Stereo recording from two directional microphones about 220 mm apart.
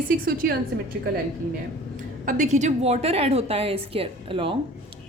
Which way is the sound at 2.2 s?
35° right (ahead or behind).